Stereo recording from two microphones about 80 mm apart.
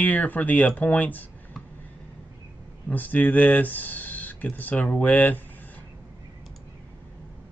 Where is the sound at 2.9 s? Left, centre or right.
Left.